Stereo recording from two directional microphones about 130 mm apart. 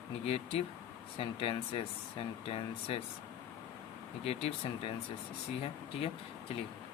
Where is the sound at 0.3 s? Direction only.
50° left (ahead or behind).